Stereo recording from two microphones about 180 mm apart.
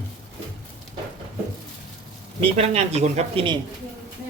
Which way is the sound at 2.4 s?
35° right (ahead or behind).